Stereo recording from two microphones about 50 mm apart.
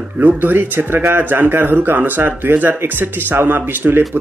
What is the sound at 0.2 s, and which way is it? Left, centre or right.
Speech, right.